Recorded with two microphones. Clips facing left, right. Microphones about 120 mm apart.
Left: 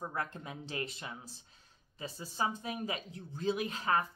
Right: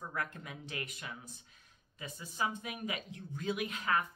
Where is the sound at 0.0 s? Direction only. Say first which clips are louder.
Left 2 dB; 30° left (ahead or behind).